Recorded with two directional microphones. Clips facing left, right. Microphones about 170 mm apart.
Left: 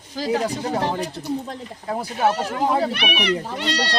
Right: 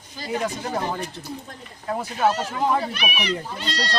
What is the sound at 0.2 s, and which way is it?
Speech, 90° left.